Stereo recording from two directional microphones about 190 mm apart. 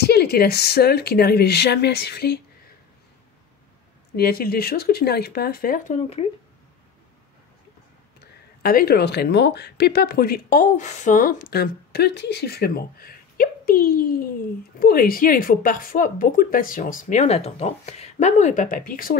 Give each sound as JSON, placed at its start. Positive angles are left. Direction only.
{"t": 0.0, "sound": "speech", "side_deg": 55}
{"t": 4.2, "sound": "speech", "side_deg": 55}
{"t": 5.9, "sound": "speech", "side_deg": 30}
{"t": 8.6, "sound": "speech", "side_deg": 55}